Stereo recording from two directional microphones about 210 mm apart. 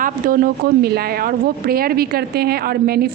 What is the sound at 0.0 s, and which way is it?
A woman's voice, 40° right (ahead or behind).